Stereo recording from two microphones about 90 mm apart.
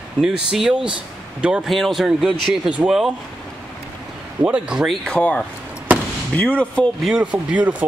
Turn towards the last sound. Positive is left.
turn(degrees=-15)  # may be behind; listen again after turning